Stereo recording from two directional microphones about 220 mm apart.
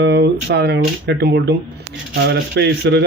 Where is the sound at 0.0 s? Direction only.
50° right (ahead or behind).